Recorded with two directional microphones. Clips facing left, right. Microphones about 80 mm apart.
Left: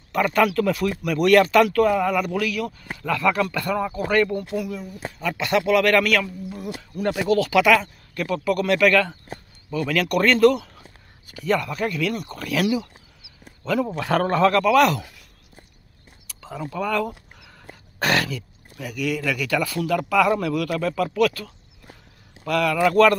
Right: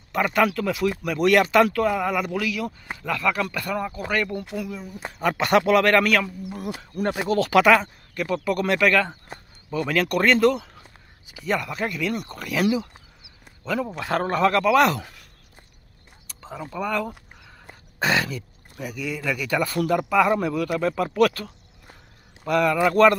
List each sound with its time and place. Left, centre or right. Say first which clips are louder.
0.1 s speech: left 2 dB; centre
3.1 s speech: left 3 dB; centre
4.6 s speech: left 2 dB; centre
5.2 s speech: right 3 dB; right; by 12.6 s centre
13.9 s speech: left 3 dB; centre
14.6 s speech: left 1 dB; right
16.7 s a sound: left 2 dB; centre
18.3 s a sound: left 1 dB; right
18.9 s speech: left 4 dB; right
20.0 s speech: left 2 dB; right
22.5 s speech: even; right